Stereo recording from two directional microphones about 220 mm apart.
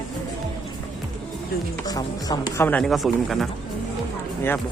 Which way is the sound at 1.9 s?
15° left (ahead or behind).